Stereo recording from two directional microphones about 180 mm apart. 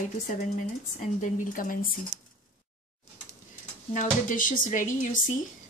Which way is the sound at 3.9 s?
45° left (ahead or behind).